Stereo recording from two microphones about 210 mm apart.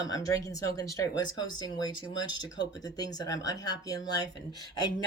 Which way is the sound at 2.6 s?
20° left (ahead or behind).